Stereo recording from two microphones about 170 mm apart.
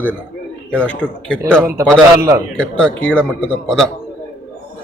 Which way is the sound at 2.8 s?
5° left (ahead or behind).